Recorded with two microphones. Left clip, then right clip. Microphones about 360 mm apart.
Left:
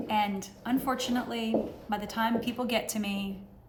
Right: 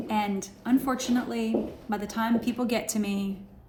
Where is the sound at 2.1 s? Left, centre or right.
Left.